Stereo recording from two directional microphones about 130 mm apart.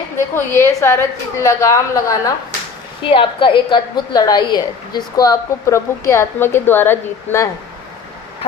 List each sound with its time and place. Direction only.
0.6 s a woman's voice: 20° left (ahead or behind)
3.0 s a woman's voice: 40° left (ahead or behind); by 7.4 s 15° left (ahead or behind)